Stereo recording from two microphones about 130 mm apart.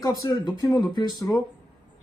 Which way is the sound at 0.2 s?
30° left (ahead or behind).